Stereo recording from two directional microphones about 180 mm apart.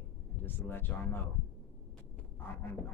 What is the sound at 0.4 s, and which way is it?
Speech, 10° left (ahead or behind).